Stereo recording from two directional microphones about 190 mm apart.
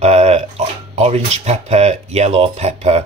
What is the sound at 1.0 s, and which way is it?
Speech, 35° right (ahead or behind).